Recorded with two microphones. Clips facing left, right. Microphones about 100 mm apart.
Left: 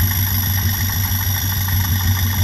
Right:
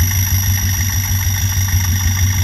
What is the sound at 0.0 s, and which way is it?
Vehicle, 10° left (ahead or behind).